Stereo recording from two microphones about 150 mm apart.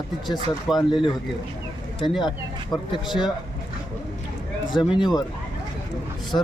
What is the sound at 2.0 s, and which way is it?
Speech, centre (ahead or behind).